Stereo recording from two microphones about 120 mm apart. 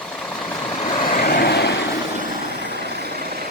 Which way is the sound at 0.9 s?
90° left.